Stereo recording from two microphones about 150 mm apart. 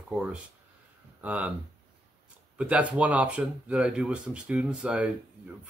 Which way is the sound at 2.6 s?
10° right (ahead or behind).